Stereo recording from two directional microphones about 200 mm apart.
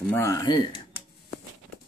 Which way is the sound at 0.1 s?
15° left (ahead or behind).